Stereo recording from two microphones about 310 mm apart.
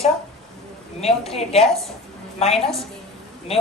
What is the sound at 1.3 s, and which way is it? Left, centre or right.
A woman's voice, centre.